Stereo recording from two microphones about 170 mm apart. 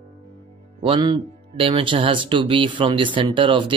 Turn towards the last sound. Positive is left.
turn(degrees=-30)  # may be behind; listen again after turning